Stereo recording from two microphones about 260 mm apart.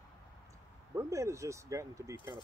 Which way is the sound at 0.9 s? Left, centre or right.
Centre.